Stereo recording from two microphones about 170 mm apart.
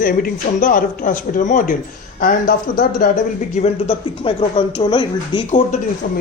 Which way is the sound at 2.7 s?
50° left (ahead or behind).